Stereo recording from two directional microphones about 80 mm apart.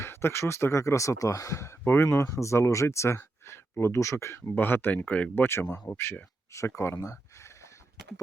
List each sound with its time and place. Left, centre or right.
0.0 s speech: left